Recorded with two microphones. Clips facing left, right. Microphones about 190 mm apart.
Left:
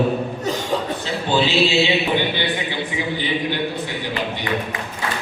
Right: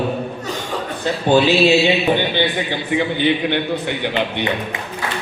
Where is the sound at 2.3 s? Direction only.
55° right (ahead or behind).